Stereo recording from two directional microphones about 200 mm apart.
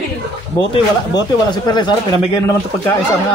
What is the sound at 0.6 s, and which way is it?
Speech, 20° left (ahead or behind).